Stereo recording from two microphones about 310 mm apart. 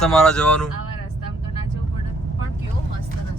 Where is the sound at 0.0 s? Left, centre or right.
Centre.